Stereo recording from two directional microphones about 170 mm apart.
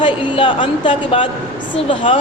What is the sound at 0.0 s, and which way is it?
A woman's voice, 30° left (ahead or behind).